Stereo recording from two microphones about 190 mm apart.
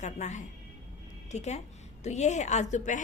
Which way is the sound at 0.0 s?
40° left (ahead or behind).